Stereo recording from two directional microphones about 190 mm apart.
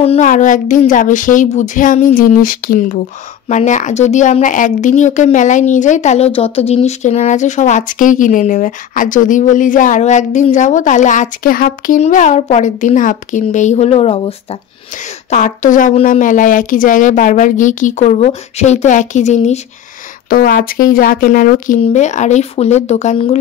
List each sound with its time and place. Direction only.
0.0 s a woman's voice: 35° left (ahead or behind)
20.2 s speech: 50° left (ahead or behind)